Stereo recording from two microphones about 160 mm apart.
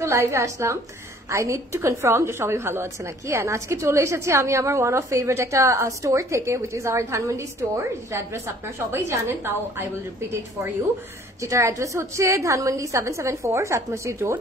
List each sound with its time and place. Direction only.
0.0 s a woman's voice: 15° right (ahead or behind)
11.4 s a woman's voice: 20° right (ahead or behind)